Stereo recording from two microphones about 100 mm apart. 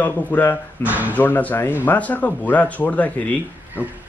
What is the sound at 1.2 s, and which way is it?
A man's voice, 20° left (ahead or behind).